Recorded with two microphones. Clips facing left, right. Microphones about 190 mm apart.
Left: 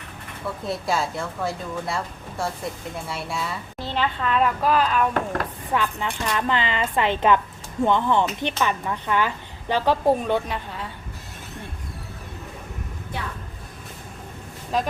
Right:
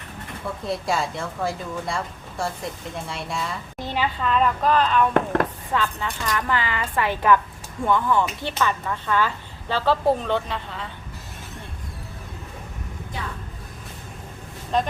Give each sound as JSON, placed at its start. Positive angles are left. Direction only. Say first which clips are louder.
{"t": 0.6, "sound": "speech", "louder": "even", "side_deg": 0}
{"t": 3.8, "sound": "speech", "louder": "even", "side_deg": -10}
{"t": 5.7, "sound": "a woman's voice", "louder": "left 1 dB", "side_deg": 15}
{"t": 14.7, "sound": "speech", "louder": "right 1 dB", "side_deg": 5}